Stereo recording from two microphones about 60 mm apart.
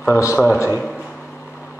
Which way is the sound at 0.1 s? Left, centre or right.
Left.